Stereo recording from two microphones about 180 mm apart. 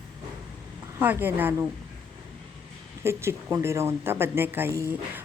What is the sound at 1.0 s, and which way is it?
Speech, 10° right (ahead or behind).